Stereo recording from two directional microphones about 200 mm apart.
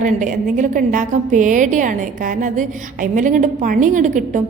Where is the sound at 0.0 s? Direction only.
40° right (ahead or behind).